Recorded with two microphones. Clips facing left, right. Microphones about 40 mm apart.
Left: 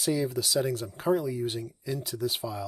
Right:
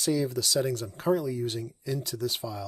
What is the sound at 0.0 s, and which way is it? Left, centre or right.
Speech, centre.